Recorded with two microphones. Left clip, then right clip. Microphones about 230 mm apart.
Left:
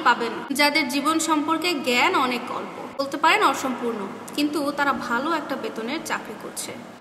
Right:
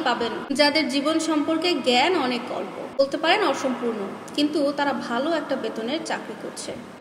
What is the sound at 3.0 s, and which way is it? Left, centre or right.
A woman's voice, centre.